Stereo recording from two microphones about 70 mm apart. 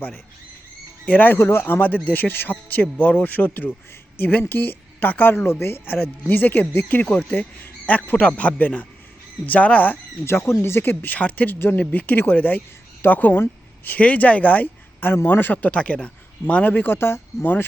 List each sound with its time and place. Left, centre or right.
1.0 s speech: left
10.2 s speech: left